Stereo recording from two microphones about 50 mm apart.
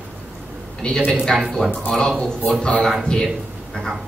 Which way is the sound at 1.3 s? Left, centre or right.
Centre.